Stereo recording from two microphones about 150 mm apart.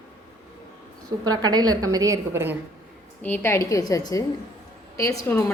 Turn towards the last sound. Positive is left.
turn(degrees=20)  # may be behind; listen again after turning